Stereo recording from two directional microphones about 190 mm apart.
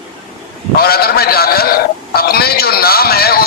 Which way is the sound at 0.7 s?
55° left (ahead or behind).